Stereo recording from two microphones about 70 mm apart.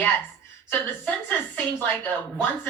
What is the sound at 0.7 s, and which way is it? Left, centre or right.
Speech, left.